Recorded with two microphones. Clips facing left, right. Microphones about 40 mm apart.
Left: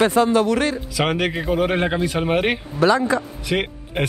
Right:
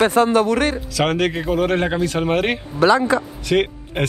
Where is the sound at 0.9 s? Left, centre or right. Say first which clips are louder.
Right 2 dB; centre.